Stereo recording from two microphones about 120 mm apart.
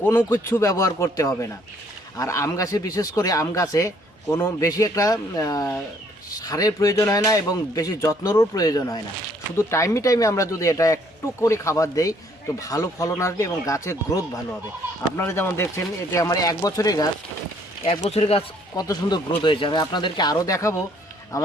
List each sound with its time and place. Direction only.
0.0 s a man's voice: 20° left (ahead or behind)
18.1 s speech: 55° left (ahead or behind)
18.8 s a man's voice: 35° left (ahead or behind)